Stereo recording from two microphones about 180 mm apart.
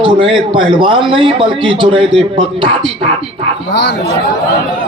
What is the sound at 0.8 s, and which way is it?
Speech, 30° right (ahead or behind).